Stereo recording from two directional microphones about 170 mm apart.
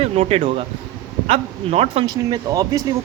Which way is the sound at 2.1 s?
20° right (ahead or behind).